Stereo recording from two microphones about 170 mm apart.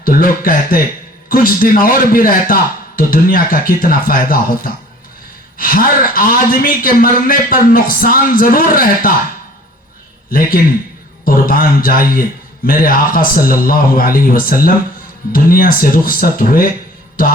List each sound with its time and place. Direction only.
0.0 s speech: 55° left (ahead or behind)
11.3 s speech: 55° left (ahead or behind)